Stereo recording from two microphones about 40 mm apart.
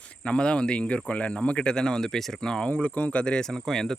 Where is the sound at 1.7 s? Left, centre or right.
Centre.